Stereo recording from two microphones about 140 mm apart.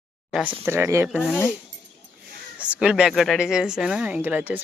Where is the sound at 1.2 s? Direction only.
10° left (ahead or behind).